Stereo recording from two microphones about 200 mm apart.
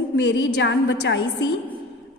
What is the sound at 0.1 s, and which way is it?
A woman's voice, 65° left (ahead or behind).